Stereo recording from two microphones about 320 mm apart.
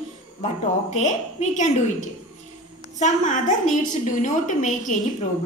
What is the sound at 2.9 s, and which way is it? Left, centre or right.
A woman's voice, left.